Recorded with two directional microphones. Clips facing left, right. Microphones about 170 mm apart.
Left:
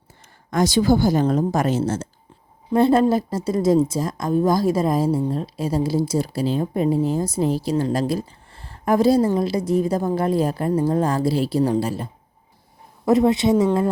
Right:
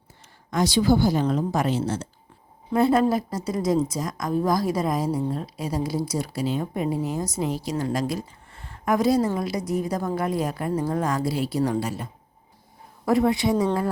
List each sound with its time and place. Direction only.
0.5 s a woman's voice: 45° left (ahead or behind)
2.7 s a woman's voice: 30° left (ahead or behind)
13.1 s a woman's voice: 20° left (ahead or behind)